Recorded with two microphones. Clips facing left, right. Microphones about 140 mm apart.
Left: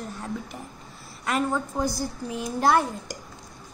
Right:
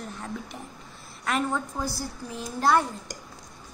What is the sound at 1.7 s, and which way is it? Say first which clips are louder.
A woman's voice: left 5 dB; 15° left (ahead or behind).